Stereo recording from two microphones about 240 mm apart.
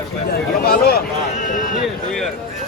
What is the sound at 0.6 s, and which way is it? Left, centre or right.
A man's voice, left.